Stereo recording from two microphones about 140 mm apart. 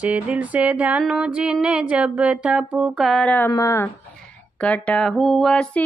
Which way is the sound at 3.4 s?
20° left (ahead or behind).